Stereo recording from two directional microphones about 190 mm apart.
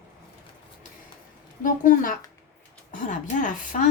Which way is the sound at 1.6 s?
45° left (ahead or behind).